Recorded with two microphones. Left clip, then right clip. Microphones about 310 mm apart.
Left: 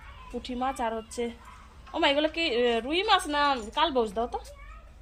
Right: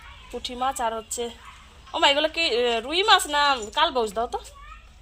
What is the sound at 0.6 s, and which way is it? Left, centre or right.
A woman's voice, centre.